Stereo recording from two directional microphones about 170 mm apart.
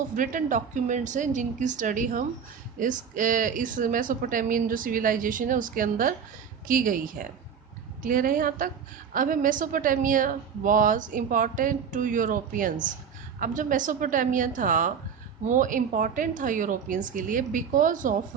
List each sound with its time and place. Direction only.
0.2 s a woman's voice: 50° right (ahead or behind)